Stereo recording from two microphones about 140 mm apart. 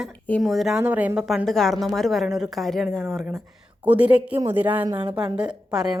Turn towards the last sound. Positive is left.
turn(degrees=-5)  # may be behind; listen again after turning